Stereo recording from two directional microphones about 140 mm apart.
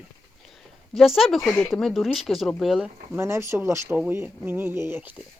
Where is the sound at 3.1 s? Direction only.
20° right (ahead or behind).